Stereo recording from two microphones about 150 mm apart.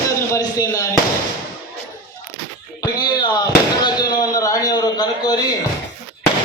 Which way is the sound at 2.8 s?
25° left (ahead or behind).